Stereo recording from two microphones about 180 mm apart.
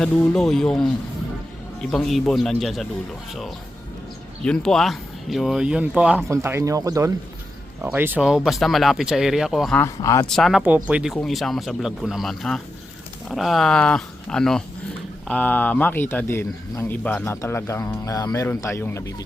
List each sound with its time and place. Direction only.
0.0 s speech: 5° left (ahead or behind)
4.4 s speech: 5° left (ahead or behind)
9.7 s speech: 15° left (ahead or behind)
10.2 s speech: centre (ahead or behind)